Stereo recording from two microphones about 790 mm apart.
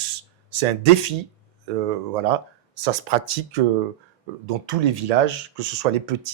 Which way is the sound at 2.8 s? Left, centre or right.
Right.